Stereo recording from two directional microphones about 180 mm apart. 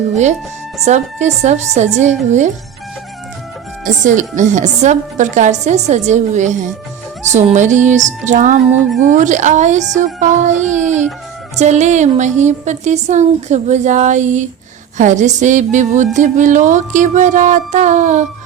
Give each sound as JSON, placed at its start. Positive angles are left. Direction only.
{"t": 0.1, "sound": "speech", "side_deg": -40}
{"t": 3.8, "sound": "speech", "side_deg": -45}